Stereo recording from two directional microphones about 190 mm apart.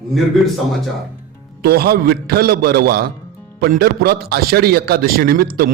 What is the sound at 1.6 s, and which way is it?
A man's voice, 55° right (ahead or behind).